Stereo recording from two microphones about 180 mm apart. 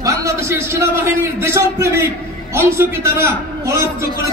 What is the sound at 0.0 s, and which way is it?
A man's voice, 15° right (ahead or behind).